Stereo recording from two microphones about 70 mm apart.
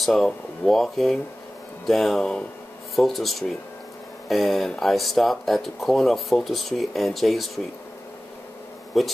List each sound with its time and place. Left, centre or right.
0.0 s speech: centre
9.0 s speech: centre